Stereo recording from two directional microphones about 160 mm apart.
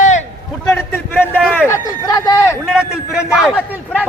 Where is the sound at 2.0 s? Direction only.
25° left (ahead or behind).